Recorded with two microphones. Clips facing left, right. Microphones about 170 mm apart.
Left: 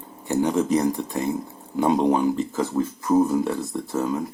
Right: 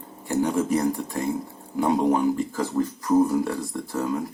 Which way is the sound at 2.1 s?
20° left (ahead or behind).